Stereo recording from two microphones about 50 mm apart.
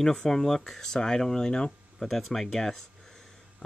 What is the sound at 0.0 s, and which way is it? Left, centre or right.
Speech, centre.